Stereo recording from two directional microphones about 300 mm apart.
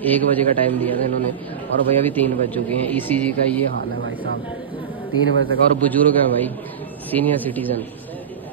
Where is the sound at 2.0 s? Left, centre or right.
Centre.